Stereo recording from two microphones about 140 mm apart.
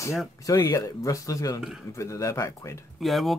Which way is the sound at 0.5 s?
20° left (ahead or behind).